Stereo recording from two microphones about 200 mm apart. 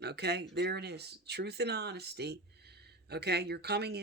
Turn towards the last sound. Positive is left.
turn(degrees=-55)  # may be behind; listen again after turning